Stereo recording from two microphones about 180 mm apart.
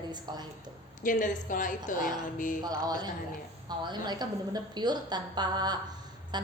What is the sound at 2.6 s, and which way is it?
A woman's voice, 20° right (ahead or behind).